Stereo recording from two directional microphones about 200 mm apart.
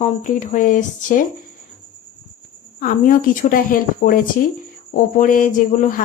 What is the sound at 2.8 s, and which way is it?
Speech, 45° left (ahead or behind).